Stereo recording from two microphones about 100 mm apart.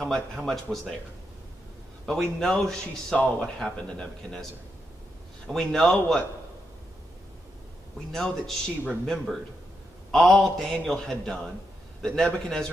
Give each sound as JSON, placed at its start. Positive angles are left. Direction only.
{"t": 0.0, "sound": "speech", "side_deg": 0}
{"t": 2.0, "sound": "speech", "side_deg": 5}
{"t": 5.5, "sound": "speech", "side_deg": 5}
{"t": 8.1, "sound": "a man's voice", "side_deg": 5}